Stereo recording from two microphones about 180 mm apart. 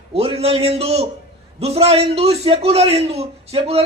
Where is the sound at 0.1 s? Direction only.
35° right (ahead or behind).